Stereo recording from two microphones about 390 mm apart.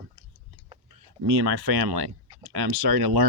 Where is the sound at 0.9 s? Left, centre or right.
Right.